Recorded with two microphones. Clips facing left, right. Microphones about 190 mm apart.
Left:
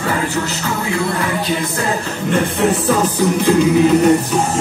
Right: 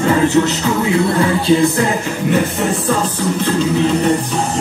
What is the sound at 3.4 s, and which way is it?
Music, 10° left (ahead or behind).